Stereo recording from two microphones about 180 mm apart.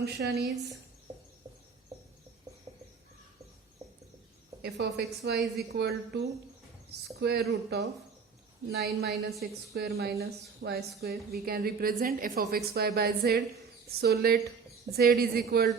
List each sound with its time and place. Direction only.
0.0 s a woman's voice: 65° right (ahead or behind)
4.6 s a woman's voice: 65° right (ahead or behind)